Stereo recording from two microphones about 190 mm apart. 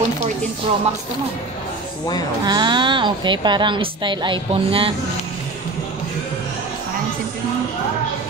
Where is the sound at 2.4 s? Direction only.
25° right (ahead or behind).